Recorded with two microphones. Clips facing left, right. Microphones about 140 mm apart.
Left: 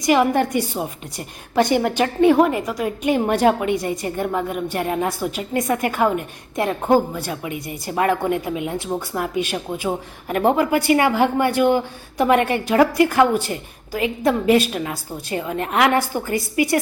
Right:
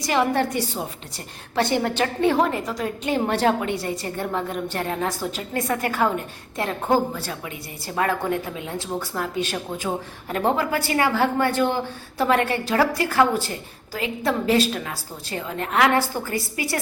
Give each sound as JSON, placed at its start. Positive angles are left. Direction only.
{"t": 0.0, "sound": "a woman's voice", "side_deg": 15}